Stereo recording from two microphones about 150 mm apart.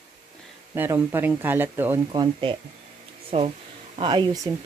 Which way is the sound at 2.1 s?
30° right (ahead or behind).